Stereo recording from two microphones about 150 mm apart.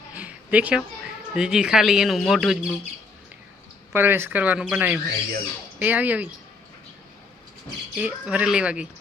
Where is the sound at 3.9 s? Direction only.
15° right (ahead or behind).